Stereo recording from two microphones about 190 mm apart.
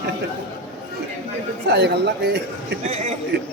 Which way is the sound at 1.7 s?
60° right (ahead or behind).